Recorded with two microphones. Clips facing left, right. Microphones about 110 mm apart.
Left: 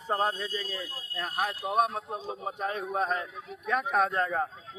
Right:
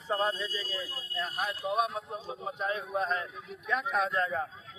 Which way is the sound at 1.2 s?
55° left (ahead or behind).